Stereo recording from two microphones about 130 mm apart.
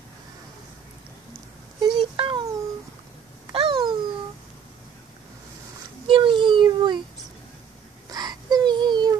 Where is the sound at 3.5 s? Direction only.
40° right (ahead or behind).